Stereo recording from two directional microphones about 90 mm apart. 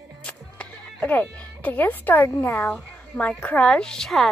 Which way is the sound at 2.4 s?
20° left (ahead or behind).